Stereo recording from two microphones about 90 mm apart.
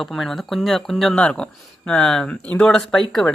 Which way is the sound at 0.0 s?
Centre (ahead or behind).